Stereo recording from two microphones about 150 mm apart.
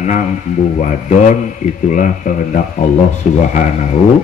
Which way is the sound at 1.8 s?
60° left (ahead or behind).